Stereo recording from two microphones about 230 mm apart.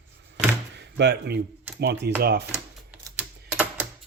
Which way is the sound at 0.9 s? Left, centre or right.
Right.